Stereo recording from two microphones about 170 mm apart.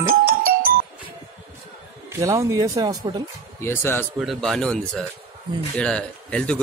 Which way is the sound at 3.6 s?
15° left (ahead or behind).